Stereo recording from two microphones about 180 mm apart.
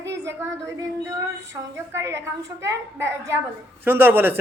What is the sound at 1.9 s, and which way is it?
Speech, 15° right (ahead or behind).